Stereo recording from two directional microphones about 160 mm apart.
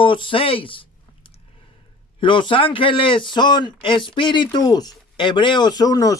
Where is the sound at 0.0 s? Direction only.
30° left (ahead or behind).